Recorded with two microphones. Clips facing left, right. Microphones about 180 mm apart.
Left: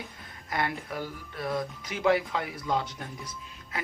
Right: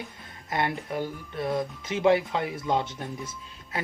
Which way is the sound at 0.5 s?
25° right (ahead or behind).